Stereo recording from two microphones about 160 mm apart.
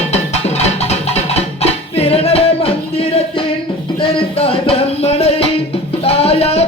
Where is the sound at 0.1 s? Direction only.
45° left (ahead or behind).